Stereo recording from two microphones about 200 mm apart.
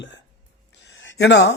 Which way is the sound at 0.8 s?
65° left (ahead or behind).